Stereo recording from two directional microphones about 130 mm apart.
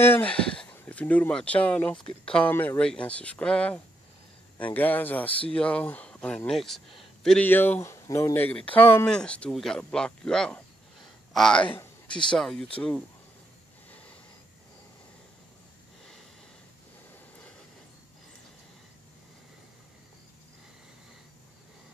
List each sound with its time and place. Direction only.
0.0 s speech: 15° left (ahead or behind)
7.4 s speech: 15° left (ahead or behind)
8.5 s speech: 10° left (ahead or behind)
13.8 s snort: 10° left (ahead or behind)